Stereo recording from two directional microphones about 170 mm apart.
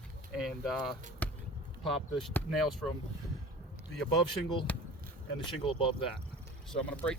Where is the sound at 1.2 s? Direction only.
10° left (ahead or behind).